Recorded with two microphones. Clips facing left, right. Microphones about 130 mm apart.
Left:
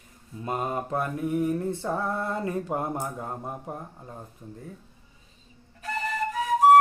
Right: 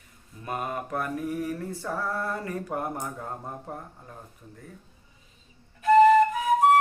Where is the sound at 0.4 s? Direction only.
25° left (ahead or behind).